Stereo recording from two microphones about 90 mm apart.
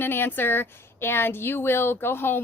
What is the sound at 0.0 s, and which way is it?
A woman's voice, 25° left (ahead or behind).